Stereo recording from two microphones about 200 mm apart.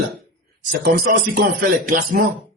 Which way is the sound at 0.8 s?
50° right (ahead or behind).